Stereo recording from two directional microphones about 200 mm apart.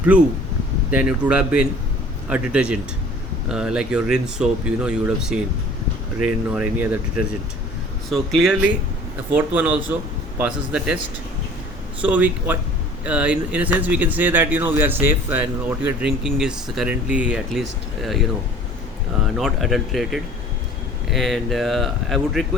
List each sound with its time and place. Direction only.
0.1 s speech: 5° right (ahead or behind)
8.1 s speech: centre (ahead or behind)
12.0 s speech: 5° right (ahead or behind)
19.2 s speech: centre (ahead or behind)